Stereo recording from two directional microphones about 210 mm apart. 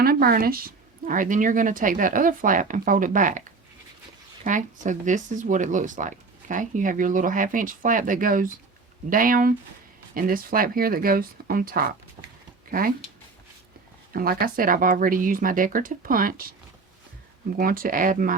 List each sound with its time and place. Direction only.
0.0 s speech: 45° right (ahead or behind)
4.4 s speech: 35° right (ahead or behind)
14.1 s speech: 45° right (ahead or behind)
17.6 s speech: 45° right (ahead or behind)